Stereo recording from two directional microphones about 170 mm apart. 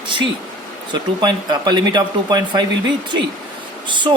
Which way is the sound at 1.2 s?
25° right (ahead or behind).